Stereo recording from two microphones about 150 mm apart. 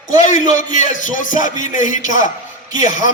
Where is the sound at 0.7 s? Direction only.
60° left (ahead or behind).